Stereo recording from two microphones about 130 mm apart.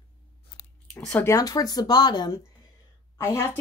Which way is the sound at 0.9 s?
15° left (ahead or behind).